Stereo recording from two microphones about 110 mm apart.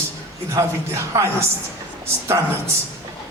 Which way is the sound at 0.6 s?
35° right (ahead or behind).